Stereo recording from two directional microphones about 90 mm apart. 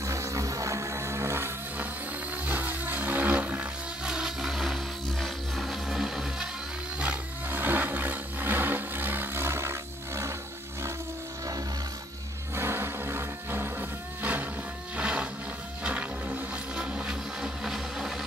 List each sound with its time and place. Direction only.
0.0 s music: 35° right (ahead or behind)
2.4 s roar: 20° right (ahead or behind); by 4.7 s 5° right (ahead or behind)
5.2 s music: centre (ahead or behind)
7.0 s roar: 20° right (ahead or behind)
12.5 s music: 25° right (ahead or behind)
15.0 s a sound: 15° right (ahead or behind)
15.8 s music: 15° right (ahead or behind)